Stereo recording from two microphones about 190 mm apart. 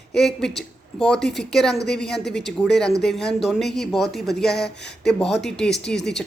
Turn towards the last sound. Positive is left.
turn(degrees=5)  # may be behind; listen again after turning